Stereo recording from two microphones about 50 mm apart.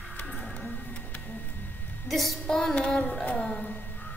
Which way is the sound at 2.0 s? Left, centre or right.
Centre.